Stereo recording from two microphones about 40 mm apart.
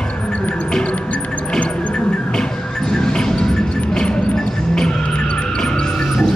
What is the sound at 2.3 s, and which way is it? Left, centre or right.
Music, centre.